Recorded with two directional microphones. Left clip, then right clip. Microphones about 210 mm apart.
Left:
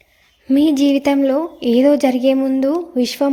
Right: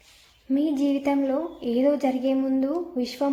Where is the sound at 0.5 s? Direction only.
45° left (ahead or behind).